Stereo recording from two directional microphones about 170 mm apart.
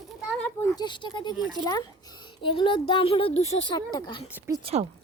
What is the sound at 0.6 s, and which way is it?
Speech, 25° left (ahead or behind).